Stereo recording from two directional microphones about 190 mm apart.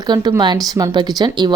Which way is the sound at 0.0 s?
20° right (ahead or behind).